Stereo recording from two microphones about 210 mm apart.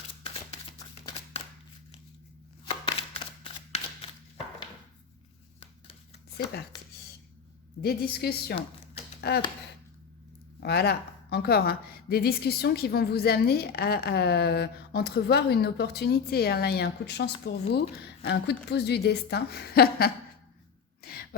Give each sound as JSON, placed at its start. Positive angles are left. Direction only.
{"t": 2.6, "sound": "chopping", "side_deg": 25}
{"t": 6.7, "sound": "a sound", "side_deg": 20}
{"t": 7.8, "sound": "a woman's voice", "side_deg": 45}
{"t": 10.6, "sound": "a woman's voice", "side_deg": 50}
{"t": 21.0, "sound": "throat clearing", "side_deg": 45}